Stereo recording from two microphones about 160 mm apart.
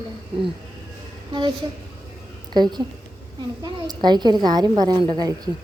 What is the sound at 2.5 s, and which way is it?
A woman's voice, 25° right (ahead or behind).